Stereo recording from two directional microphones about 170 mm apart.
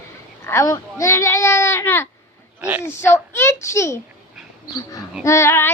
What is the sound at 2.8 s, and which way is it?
Child singing, 15° left (ahead or behind).